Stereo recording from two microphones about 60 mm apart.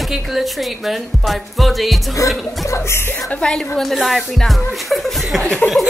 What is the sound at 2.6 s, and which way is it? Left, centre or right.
Music, left.